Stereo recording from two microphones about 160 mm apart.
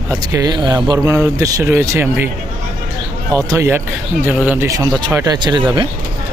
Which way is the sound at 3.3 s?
20° right (ahead or behind).